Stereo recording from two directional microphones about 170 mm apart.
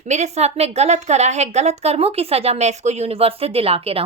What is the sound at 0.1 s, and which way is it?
A woman's voice, 40° right (ahead or behind).